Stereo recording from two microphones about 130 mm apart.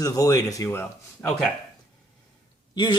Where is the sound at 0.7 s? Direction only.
15° left (ahead or behind).